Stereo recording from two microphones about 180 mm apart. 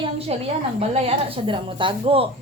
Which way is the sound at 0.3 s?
35° right (ahead or behind).